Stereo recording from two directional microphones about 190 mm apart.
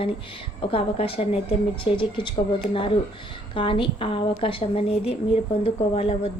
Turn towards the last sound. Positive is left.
turn(degrees=30)  # may be behind; listen again after turning